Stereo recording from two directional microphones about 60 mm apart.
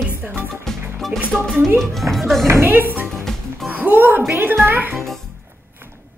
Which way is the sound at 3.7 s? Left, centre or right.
Right.